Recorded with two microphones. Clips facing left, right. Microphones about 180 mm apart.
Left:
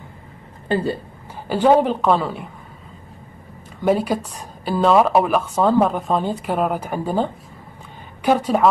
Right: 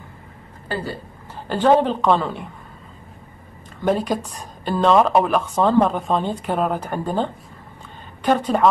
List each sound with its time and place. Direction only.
0.7 s a woman's voice: 25° left (ahead or behind)
1.5 s speech: 10° left (ahead or behind)
3.8 s a woman's voice: 10° left (ahead or behind)